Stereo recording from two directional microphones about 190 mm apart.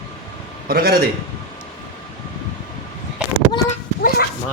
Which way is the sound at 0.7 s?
55° right (ahead or behind).